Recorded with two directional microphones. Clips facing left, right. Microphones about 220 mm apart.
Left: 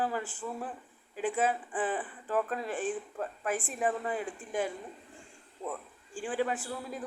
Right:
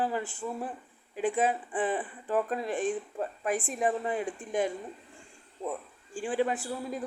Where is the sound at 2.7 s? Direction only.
40° right (ahead or behind).